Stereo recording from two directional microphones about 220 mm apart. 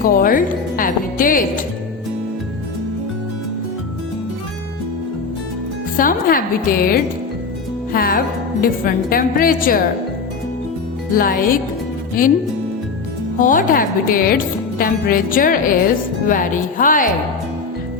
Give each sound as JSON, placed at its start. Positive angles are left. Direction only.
{"t": 0.0, "sound": "music", "side_deg": 40}
{"t": 6.0, "sound": "a woman's voice", "side_deg": 40}
{"t": 11.1, "sound": "a woman's voice", "side_deg": 40}
{"t": 13.4, "sound": "a woman's voice", "side_deg": 40}